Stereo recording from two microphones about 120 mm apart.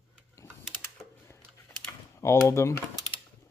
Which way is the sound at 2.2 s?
25° left (ahead or behind).